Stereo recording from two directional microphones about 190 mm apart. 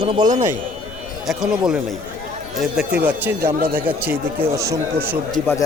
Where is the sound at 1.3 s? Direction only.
5° right (ahead or behind).